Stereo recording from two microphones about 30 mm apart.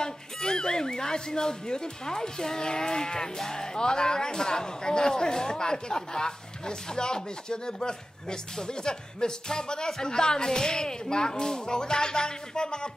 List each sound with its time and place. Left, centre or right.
0.0 s speech: left